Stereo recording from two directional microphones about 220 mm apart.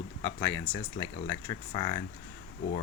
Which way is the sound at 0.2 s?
10° left (ahead or behind).